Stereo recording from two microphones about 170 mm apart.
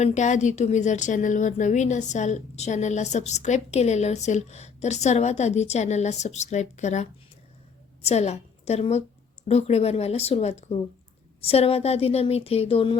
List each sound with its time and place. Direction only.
0.0 s a woman's voice: 45° left (ahead or behind)